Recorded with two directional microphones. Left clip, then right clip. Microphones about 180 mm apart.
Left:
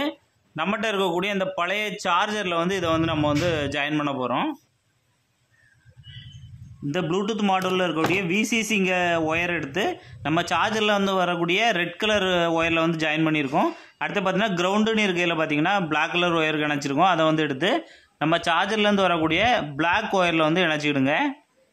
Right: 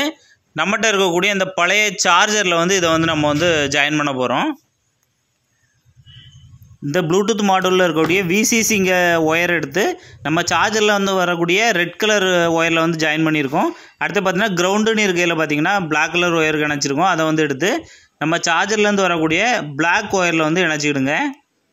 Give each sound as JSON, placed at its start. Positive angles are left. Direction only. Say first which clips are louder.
{"t": 0.6, "sound": "a man's voice", "louder": "right 8 dB", "side_deg": -15}
{"t": 6.9, "sound": "a man's voice", "louder": "right 9 dB", "side_deg": -30}